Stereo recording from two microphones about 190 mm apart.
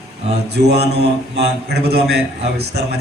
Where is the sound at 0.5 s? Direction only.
60° right (ahead or behind).